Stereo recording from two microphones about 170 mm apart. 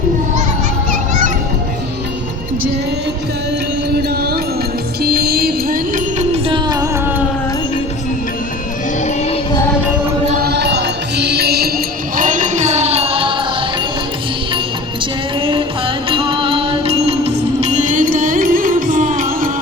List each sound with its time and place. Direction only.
0.9 s children playing: 45° right (ahead or behind)
3.9 s music: 70° right (ahead or behind); by 7.0 s 20° right (ahead or behind)
9.0 s music: 40° left (ahead or behind)
10.3 s mantra: 70° right (ahead or behind)
12.1 s music: 50° right (ahead or behind); by 13.7 s 30° right (ahead or behind)
15.4 s music: 30° right (ahead or behind); by 19.5 s 55° right (ahead or behind)